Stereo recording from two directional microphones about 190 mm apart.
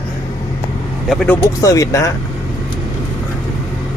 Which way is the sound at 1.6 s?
15° left (ahead or behind).